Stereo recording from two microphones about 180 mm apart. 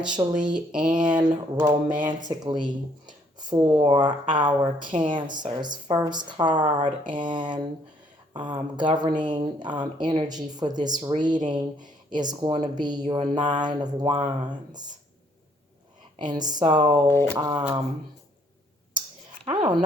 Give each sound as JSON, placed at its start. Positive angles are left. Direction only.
{"t": 0.3, "sound": "speech", "side_deg": -5}
{"t": 1.1, "sound": "speech", "side_deg": -20}
{"t": 16.2, "sound": "speech", "side_deg": -20}
{"t": 17.1, "sound": "speech", "side_deg": 15}
{"t": 17.3, "sound": "speech", "side_deg": -25}
{"t": 19.5, "sound": "speech", "side_deg": -25}